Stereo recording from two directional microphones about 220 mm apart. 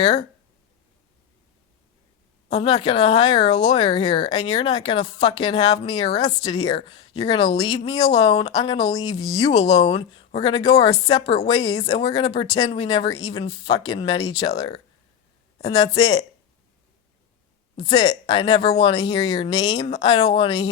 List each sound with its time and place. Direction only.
2.5 s a woman's voice: 20° left (ahead or behind)
11.8 s speech: 30° left (ahead or behind)
12.0 s a woman's voice: 20° left (ahead or behind)
17.7 s speech: 20° left (ahead or behind)